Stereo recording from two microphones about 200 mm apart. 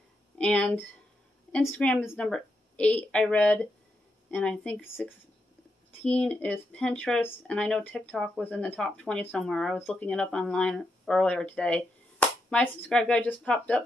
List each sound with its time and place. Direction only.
0.4 s speech: 5° left (ahead or behind)